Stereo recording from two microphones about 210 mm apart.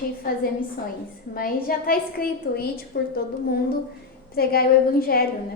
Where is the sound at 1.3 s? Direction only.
45° left (ahead or behind).